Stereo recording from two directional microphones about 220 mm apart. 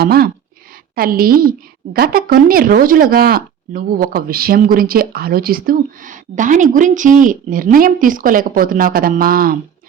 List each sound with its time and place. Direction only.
0.0 s a woman's voice: 45° right (ahead or behind)